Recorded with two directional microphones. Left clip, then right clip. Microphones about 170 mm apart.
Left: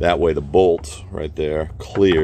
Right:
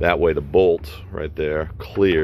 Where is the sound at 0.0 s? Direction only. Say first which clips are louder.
Left 1 dB; 25° left (ahead or behind).